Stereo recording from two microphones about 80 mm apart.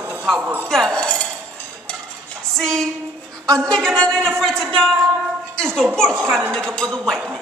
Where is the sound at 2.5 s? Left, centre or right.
Centre.